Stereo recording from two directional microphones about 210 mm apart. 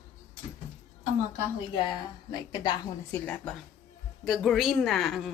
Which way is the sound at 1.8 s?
20° left (ahead or behind).